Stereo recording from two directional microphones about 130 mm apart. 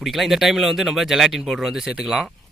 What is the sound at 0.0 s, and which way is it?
Speech, centre (ahead or behind).